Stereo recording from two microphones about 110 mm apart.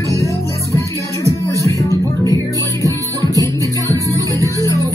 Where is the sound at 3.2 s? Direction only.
30° left (ahead or behind).